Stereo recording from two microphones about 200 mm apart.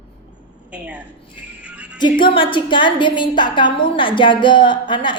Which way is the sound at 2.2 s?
25° left (ahead or behind).